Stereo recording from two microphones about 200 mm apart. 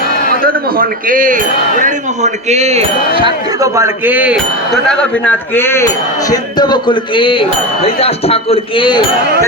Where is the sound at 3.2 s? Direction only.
15° right (ahead or behind); by 9.0 s 25° left (ahead or behind).